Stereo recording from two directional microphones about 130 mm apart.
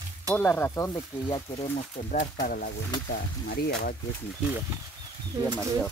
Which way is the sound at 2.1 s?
85° left.